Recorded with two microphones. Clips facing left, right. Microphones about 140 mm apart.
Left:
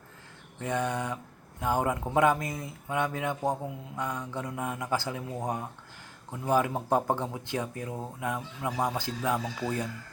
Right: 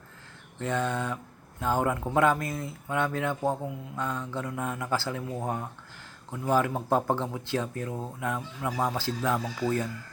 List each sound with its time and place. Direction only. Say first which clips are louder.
0.6 s speech: right 1 dB; 15° left (ahead or behind)